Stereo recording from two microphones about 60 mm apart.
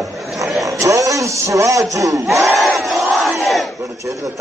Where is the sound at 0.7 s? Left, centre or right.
Right.